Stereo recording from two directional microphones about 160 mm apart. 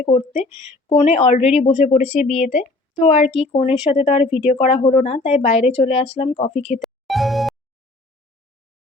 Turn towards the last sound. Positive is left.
turn(degrees=0)  # may be behind; listen again after turning